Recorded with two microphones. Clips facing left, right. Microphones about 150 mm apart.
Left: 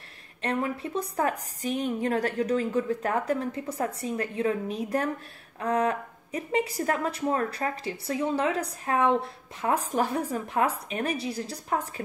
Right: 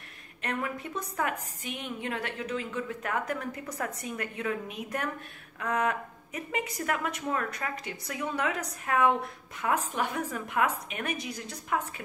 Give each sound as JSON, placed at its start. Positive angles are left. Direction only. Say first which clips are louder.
{"t": 0.4, "sound": "a woman's voice", "louder": "left 5 dB", "side_deg": 30}